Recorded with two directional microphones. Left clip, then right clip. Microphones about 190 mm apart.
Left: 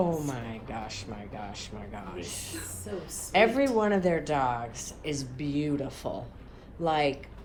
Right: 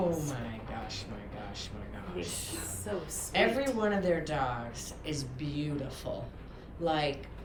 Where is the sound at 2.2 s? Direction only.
25° left (ahead or behind).